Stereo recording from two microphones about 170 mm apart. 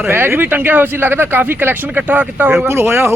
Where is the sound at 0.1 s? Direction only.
15° right (ahead or behind).